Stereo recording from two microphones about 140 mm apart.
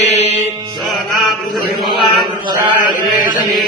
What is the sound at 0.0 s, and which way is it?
Mantra, 50° left (ahead or behind).